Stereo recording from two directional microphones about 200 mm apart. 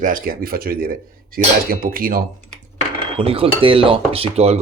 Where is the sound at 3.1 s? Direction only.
30° right (ahead or behind).